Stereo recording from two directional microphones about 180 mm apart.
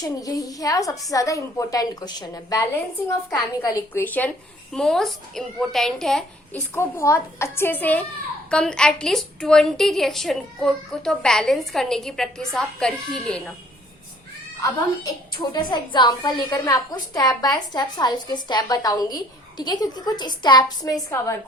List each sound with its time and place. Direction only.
0.0 s a woman's voice: 20° left (ahead or behind); by 6.6 s 5° left (ahead or behind)
6.7 s a woman's voice: 15° left (ahead or behind)
15.4 s a woman's voice: 25° left (ahead or behind)